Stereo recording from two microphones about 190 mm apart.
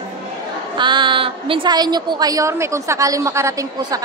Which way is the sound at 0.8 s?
25° right (ahead or behind).